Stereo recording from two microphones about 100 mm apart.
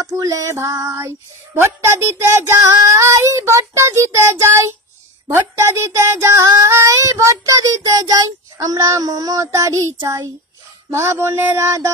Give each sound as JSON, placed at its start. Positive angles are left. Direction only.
{"t": 0.0, "sound": "female singing", "side_deg": -35}
{"t": 6.7, "sound": "speech", "side_deg": -30}
{"t": 10.9, "sound": "female singing", "side_deg": -25}